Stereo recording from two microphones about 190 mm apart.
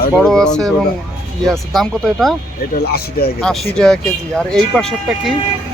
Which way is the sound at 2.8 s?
55° left (ahead or behind).